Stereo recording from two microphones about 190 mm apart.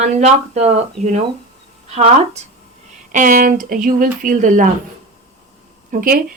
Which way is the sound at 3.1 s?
45° right (ahead or behind).